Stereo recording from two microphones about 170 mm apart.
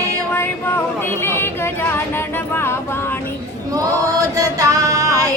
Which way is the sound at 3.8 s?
20° right (ahead or behind).